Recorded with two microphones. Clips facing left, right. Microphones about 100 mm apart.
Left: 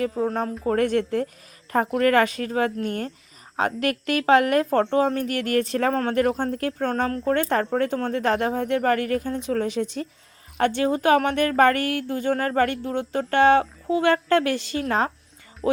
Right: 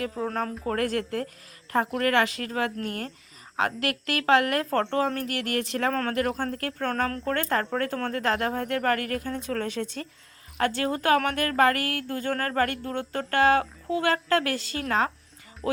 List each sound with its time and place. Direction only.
0.1 s speech: 5° left (ahead or behind)
0.7 s speech: 25° left (ahead or behind)
5.9 s a woman's voice: 15° left (ahead or behind)